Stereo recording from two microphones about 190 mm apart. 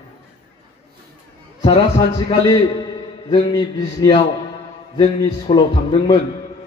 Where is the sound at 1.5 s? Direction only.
25° left (ahead or behind).